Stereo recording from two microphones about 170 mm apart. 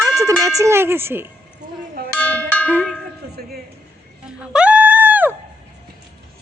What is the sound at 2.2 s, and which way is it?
Cowbell, 10° left (ahead or behind).